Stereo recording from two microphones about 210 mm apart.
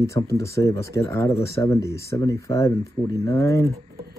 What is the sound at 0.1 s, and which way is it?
Speech, 15° left (ahead or behind).